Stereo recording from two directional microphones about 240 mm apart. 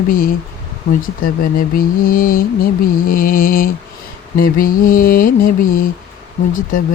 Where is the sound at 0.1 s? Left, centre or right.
Left.